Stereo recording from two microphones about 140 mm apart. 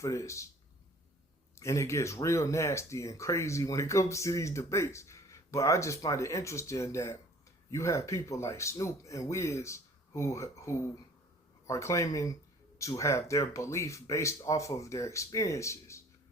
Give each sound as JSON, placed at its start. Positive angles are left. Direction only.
{"t": 0.0, "sound": "speech", "side_deg": 20}
{"t": 1.5, "sound": "speech", "side_deg": 20}